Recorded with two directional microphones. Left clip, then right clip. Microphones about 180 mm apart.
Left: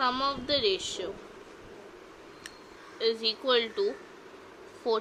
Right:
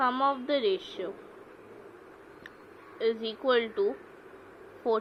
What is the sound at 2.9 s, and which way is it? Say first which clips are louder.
A woman's voice: left 2 dB; 5° right (ahead or behind).